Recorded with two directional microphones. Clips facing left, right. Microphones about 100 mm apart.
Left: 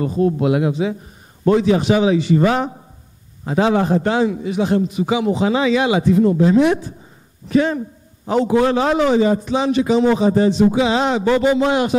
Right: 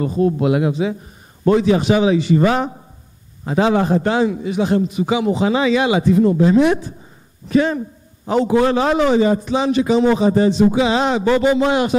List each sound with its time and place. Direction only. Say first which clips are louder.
0.0 s a man's voice: even; 20° right (ahead or behind)